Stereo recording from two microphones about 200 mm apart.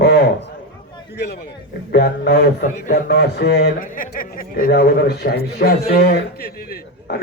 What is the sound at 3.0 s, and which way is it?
A man's voice, 55° left (ahead or behind).